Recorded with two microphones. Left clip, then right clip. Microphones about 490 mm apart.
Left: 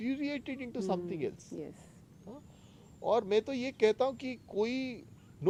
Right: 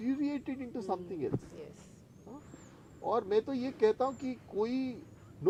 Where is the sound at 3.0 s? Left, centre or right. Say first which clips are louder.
Left 1 dB; right.